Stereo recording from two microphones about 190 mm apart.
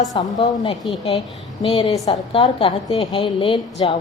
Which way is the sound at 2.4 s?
30° left (ahead or behind).